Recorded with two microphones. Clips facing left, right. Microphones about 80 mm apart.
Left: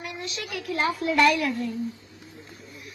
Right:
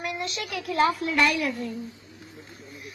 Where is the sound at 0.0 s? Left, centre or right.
Right.